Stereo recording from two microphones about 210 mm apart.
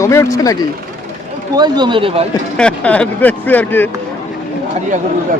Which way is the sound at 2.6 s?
5° left (ahead or behind).